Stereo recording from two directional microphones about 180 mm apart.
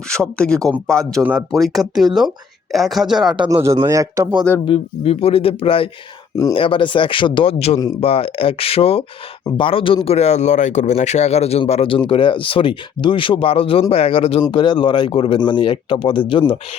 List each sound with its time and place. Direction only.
0.1 s speech: 5° left (ahead or behind)
1.2 s speech: 10° right (ahead or behind)
3.3 s a man's voice: 20° right (ahead or behind)
4.6 s speech: 30° left (ahead or behind)